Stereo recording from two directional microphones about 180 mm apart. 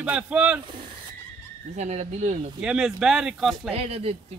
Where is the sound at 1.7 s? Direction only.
40° right (ahead or behind).